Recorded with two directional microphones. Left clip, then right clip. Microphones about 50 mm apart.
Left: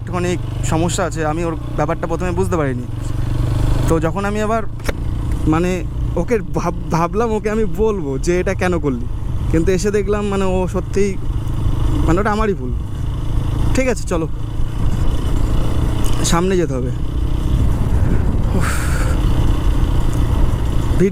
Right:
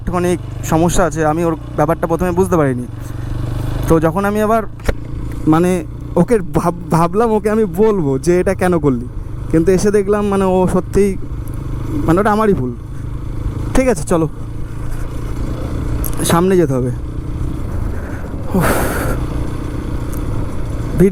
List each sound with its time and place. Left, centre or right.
0.1 s speech: right
3.6 s vehicle: left
3.8 s speech: right
10.5 s speech: right
13.7 s speech: right
15.4 s vehicle: left
16.1 s speech: right
18.5 s a sound: right
19.1 s vehicle: left